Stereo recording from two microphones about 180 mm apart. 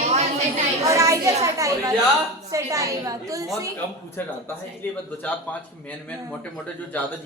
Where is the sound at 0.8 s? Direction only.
20° right (ahead or behind).